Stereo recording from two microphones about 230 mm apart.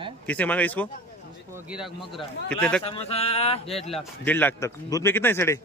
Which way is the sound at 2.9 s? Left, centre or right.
Left.